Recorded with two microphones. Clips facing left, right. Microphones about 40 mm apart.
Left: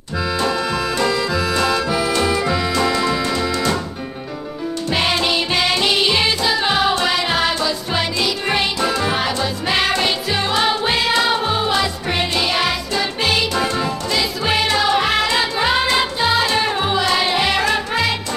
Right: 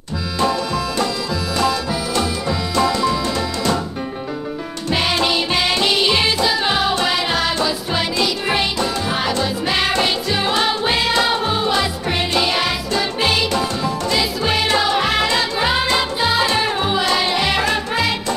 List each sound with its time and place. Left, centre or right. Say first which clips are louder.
1.7 s music: left 3 dB; left
4.8 s music: right 1 dB; centre